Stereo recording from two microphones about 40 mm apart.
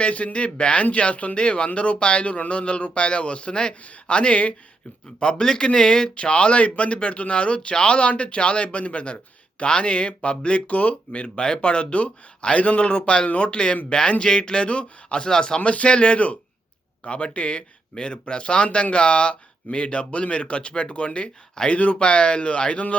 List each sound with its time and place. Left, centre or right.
0.0 s a man's voice: left
5.2 s a man's voice: left
11.3 s a man's voice: left